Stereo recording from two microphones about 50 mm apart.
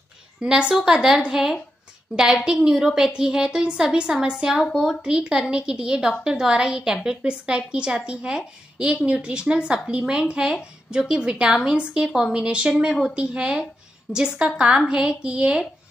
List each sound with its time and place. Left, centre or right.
0.4 s a woman's voice: centre
8.8 s a woman's voice: right